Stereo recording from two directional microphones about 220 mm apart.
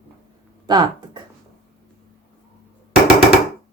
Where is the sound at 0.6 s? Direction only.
20° right (ahead or behind).